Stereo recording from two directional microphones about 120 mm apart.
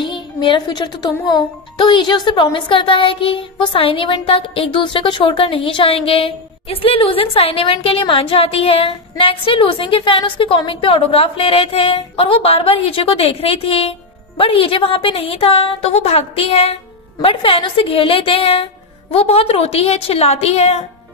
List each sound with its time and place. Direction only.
0.0 s a woman's voice: 40° left (ahead or behind); by 20.8 s 60° left (ahead or behind)